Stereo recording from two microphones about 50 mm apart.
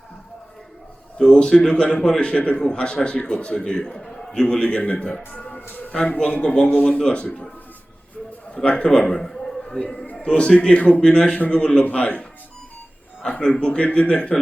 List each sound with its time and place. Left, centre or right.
1.3 s a man's voice: centre
5.5 s a sound: left
5.9 s a man's voice: centre
8.5 s a man's voice: centre
10.8 s a man's voice: left
13.4 s speech: centre